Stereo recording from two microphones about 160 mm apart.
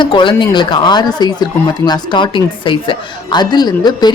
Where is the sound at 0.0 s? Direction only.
30° left (ahead or behind).